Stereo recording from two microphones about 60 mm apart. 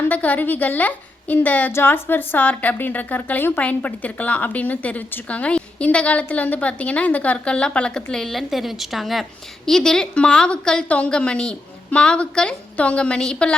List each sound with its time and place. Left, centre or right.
0.0 s a woman's voice: left
8.1 s a woman's voice: centre